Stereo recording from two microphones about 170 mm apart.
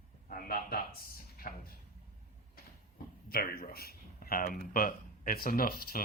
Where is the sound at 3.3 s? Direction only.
60° left (ahead or behind).